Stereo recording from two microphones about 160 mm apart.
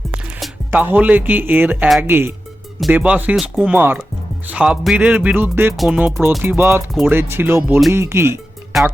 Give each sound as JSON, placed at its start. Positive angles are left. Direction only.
{"t": 0.7, "sound": "speech", "side_deg": -10}
{"t": 5.7, "sound": "music", "side_deg": 0}
{"t": 6.4, "sound": "speech", "side_deg": -15}